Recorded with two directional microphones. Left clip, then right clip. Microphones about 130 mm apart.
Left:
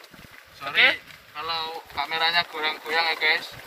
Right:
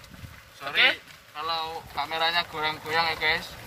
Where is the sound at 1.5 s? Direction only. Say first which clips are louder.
Left 2 dB; 35° right (ahead or behind).